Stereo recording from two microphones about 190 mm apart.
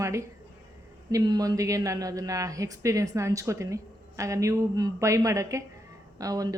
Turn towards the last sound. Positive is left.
turn(degrees=-20)  # may be behind; listen again after turning